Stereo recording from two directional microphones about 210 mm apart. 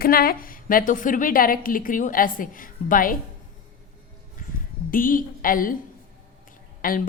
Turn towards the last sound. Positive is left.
turn(degrees=40)  # may be behind; listen again after turning